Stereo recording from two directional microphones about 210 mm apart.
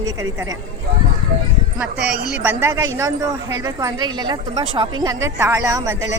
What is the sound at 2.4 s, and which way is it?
Speech, 10° right (ahead or behind).